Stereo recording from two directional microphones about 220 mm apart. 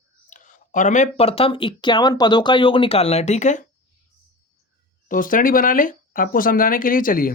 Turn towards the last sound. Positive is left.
turn(degrees=40)  # may be behind; listen again after turning